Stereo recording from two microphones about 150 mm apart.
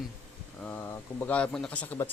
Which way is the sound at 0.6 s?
15° left (ahead or behind).